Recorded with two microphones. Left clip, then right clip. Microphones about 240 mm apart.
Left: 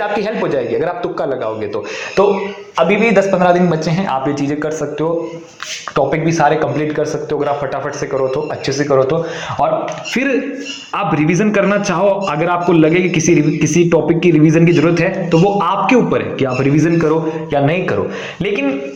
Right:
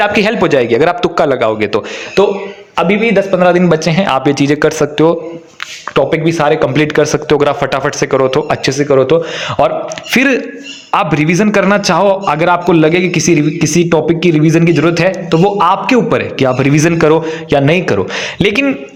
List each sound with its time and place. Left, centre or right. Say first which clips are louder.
0.0 s a man's voice: right 6 dB; right
5.9 s a man's voice: right 4 dB; right